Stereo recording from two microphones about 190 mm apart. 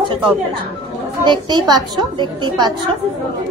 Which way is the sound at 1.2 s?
25° right (ahead or behind).